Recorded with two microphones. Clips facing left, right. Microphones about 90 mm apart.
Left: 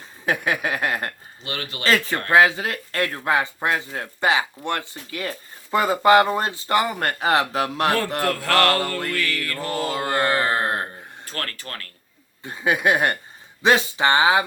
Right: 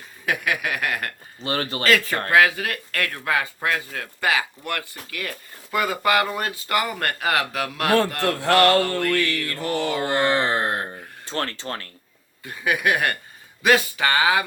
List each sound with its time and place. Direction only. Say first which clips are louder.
0.3 s speech: left 2 dB; 30° left (ahead or behind)
1.5 s speech: right 6 dB; 35° right (ahead or behind)
1.8 s speech: left 1 dB; 30° left (ahead or behind)
8.3 s speech: right 3 dB; 20° right (ahead or behind)
9.6 s mantra: right 2 dB; 35° left (ahead or behind)
10.2 s mantra: even; 25° right (ahead or behind)
11.3 s speech: right 5 dB; 25° right (ahead or behind)
12.4 s speech: left 2 dB; 25° left (ahead or behind)